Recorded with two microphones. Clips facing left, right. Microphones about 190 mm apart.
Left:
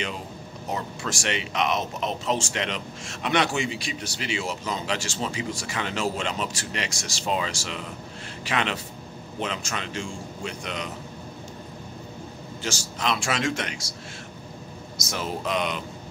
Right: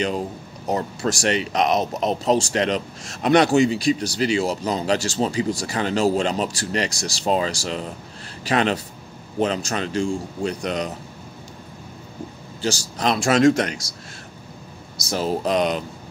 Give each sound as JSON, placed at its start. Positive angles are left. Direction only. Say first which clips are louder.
{"t": 0.7, "sound": "speech", "louder": "right 8 dB", "side_deg": -40}
{"t": 12.6, "sound": "speech", "louder": "right 6 dB", "side_deg": -35}
{"t": 15.0, "sound": "speech", "louder": "right 8 dB", "side_deg": -35}